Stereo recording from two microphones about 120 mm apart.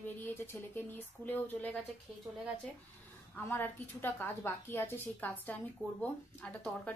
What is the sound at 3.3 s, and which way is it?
A woman's voice, 20° left (ahead or behind).